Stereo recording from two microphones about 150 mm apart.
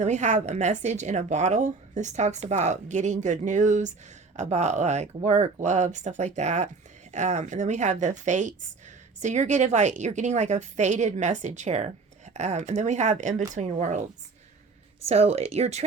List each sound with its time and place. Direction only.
0.0 s a woman's voice: 50° right (ahead or behind)
15.0 s a woman's voice: 40° right (ahead or behind)